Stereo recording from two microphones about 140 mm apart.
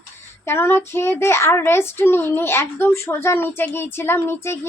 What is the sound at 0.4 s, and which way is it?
A woman's voice, 15° left (ahead or behind).